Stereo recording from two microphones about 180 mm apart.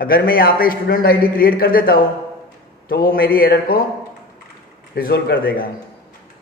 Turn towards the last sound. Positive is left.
turn(degrees=55)  # may be behind; listen again after turning